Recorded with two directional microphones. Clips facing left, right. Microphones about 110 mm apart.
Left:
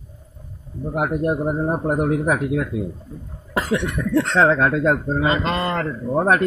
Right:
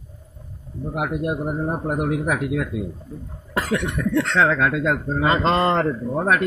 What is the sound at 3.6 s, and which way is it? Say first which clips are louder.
Cough: left 1 dB; 25° left (ahead or behind).